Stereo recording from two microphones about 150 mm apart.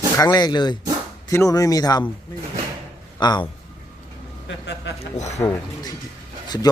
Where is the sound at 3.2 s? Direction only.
30° left (ahead or behind).